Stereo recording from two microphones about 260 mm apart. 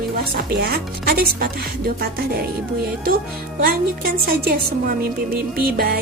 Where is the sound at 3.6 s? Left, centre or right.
Right.